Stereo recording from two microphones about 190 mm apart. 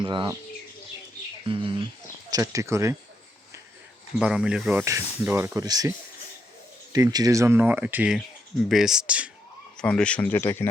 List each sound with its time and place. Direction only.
0.0 s speech: 25° right (ahead or behind)
1.5 s speech: 25° right (ahead or behind)
4.2 s speech: 5° right (ahead or behind)
6.9 s speech: 20° right (ahead or behind)
9.7 s speech: 5° left (ahead or behind)